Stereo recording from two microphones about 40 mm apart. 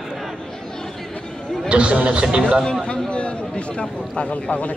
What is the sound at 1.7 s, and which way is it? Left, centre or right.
Speech, right.